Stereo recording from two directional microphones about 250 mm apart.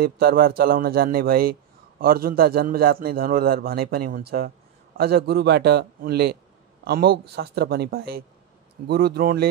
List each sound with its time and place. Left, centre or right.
0.0 s a man's voice: right